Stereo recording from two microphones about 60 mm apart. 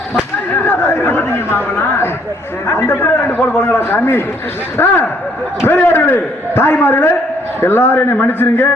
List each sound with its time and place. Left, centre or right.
0.5 s chatter: left
2.6 s a man's voice: left